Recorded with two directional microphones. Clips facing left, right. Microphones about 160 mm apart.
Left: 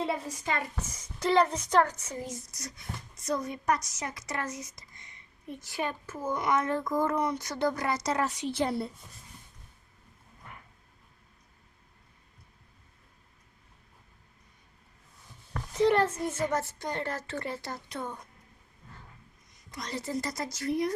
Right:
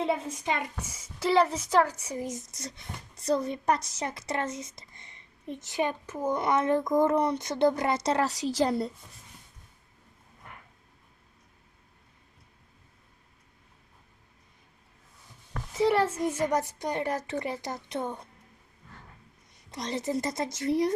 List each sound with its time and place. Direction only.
0.0 s a woman's voice: 25° right (ahead or behind)
15.7 s a woman's voice: 5° right (ahead or behind); by 18.3 s 25° right (ahead or behind)
19.5 s a woman's voice: 25° right (ahead or behind)